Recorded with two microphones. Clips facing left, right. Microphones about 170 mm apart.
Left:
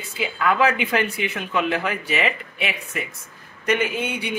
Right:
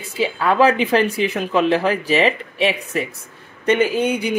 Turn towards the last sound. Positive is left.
turn(degrees=-35)  # may be behind; listen again after turning